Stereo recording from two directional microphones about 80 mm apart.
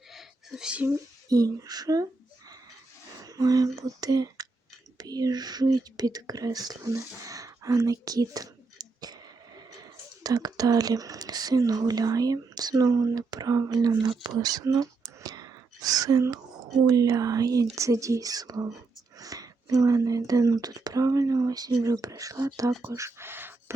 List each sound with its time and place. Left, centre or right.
0.1 s a sound: centre
1.3 s speech: right
3.2 s speech: right